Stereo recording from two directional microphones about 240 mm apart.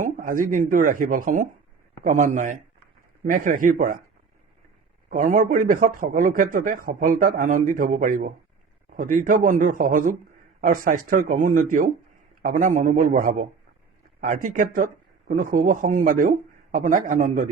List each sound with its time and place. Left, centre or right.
0.0 s a sound: right
0.5 s a man's voice: right
5.0 s a man's voice: right